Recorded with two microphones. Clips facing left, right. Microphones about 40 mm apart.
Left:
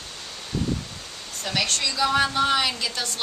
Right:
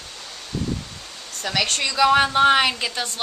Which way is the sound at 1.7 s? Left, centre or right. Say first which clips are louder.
Right 7 dB; right.